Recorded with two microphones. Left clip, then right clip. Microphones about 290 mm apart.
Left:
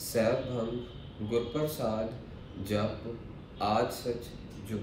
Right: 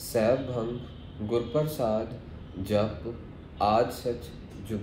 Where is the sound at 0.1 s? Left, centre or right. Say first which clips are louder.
Right 3 dB; centre.